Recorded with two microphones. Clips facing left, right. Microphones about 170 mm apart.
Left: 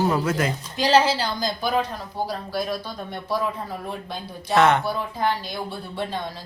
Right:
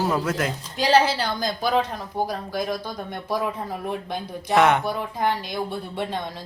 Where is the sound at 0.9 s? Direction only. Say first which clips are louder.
Even; 60° right (ahead or behind).